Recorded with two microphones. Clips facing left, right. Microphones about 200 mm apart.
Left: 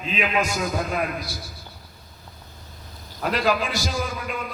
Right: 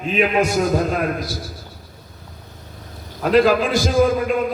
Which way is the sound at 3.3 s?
50° right (ahead or behind).